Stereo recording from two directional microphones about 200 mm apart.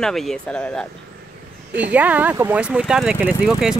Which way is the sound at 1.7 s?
10° right (ahead or behind).